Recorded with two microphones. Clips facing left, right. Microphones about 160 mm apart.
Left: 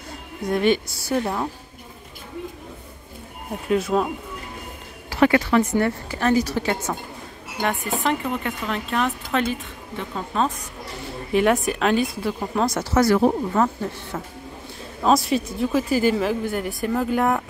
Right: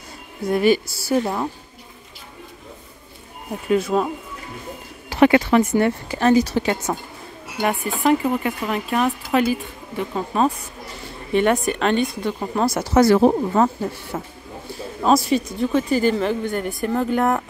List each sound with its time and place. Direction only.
0.5 s speech: 5° right (ahead or behind)
3.6 s speech: centre (ahead or behind)
5.1 s a woman's voice: 20° right (ahead or behind)
7.6 s speech: 10° right (ahead or behind)
11.3 s speech: centre (ahead or behind)
12.9 s a woman's voice: 25° right (ahead or behind)
14.2 s speech: 5° right (ahead or behind)